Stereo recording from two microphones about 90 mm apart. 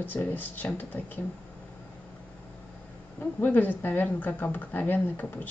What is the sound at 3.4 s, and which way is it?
Speech, 20° left (ahead or behind).